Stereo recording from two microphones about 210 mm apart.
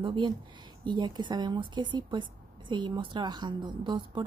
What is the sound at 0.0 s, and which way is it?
A woman's voice, 25° right (ahead or behind).